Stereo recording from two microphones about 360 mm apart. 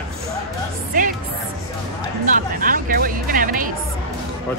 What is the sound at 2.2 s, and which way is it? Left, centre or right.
Speech, right.